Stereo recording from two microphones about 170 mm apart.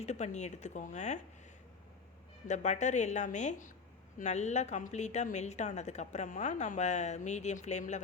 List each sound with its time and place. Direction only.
0.0 s a woman's voice: 40° left (ahead or behind)
2.5 s a woman's voice: 45° left (ahead or behind)